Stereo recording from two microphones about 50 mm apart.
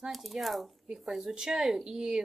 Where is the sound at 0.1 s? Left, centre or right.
Centre.